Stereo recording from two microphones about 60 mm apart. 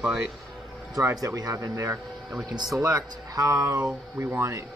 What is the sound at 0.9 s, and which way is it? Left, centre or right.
A man's voice, right.